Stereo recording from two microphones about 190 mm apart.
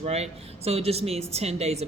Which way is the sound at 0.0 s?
35° right (ahead or behind).